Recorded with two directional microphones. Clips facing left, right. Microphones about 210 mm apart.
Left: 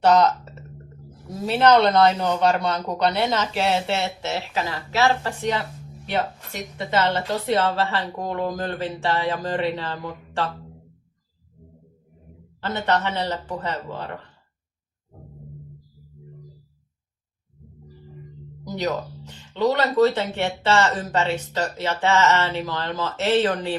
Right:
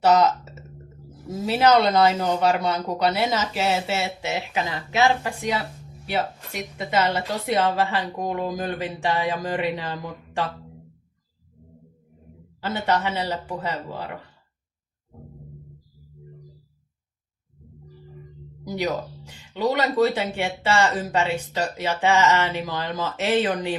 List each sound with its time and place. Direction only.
0.0 s speech: 5° right (ahead or behind)
12.6 s speech: 10° right (ahead or behind)
18.6 s speech: 10° right (ahead or behind)